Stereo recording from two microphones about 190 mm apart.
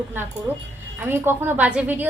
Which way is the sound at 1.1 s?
10° right (ahead or behind).